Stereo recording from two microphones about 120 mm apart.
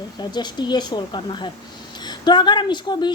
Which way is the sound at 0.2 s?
35° left (ahead or behind).